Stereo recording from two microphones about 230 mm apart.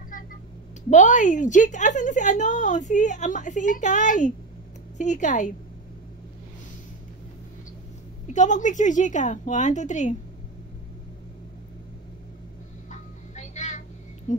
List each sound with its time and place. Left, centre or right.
0.8 s a woman's voice: left
8.3 s a woman's voice: left
12.9 s a sound: left